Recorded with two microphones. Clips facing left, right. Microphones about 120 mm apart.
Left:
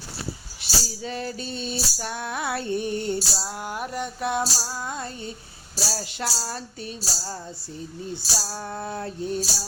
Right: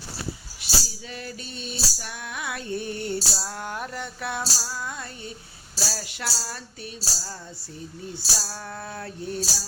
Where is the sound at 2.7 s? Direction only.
20° left (ahead or behind).